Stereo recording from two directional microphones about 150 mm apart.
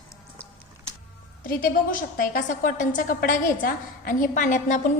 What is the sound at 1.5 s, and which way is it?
A woman's voice, 70° left (ahead or behind).